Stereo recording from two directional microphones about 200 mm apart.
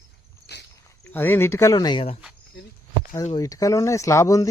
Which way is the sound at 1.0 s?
10° left (ahead or behind).